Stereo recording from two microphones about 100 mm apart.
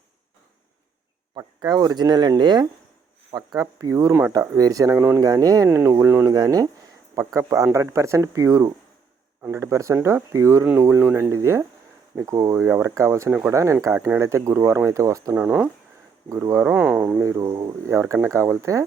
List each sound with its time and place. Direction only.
1.4 s speech: 40° right (ahead or behind)
5.6 s speech: 25° right (ahead or behind)
15.4 s speech: 15° right (ahead or behind)
16.3 s speech: 30° right (ahead or behind)
16.6 s speech: 15° right (ahead or behind)
17.2 s speech: 30° right (ahead or behind)